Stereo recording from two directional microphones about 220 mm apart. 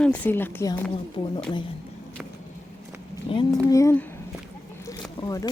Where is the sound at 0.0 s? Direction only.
5° left (ahead or behind).